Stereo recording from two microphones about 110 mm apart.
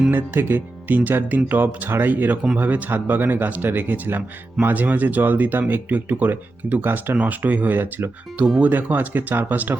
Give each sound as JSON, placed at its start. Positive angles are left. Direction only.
{"t": 0.1, "sound": "speech", "side_deg": -20}